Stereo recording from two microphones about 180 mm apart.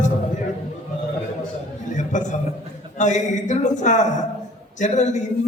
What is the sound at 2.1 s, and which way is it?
A man's voice, 45° left (ahead or behind).